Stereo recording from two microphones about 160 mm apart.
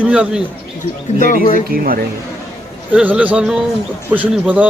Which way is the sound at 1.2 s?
60° left (ahead or behind).